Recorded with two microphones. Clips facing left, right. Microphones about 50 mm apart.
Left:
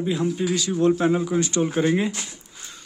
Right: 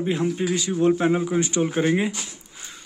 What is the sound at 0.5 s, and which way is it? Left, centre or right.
Speech, right.